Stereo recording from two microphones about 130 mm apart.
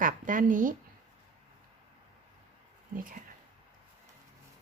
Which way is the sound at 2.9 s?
90° right.